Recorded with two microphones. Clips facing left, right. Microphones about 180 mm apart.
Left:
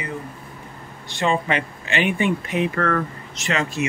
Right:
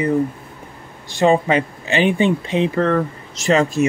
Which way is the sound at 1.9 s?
30° right (ahead or behind).